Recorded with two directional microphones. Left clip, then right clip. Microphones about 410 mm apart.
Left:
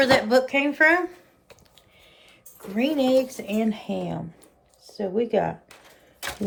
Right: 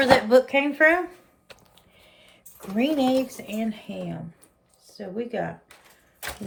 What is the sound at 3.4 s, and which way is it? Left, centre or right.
Speech, centre.